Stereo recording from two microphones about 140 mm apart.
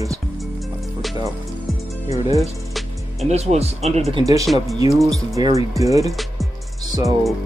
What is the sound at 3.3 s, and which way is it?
Speech, 50° right (ahead or behind).